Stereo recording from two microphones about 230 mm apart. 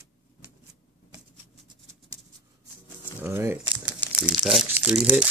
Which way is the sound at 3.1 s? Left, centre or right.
Centre.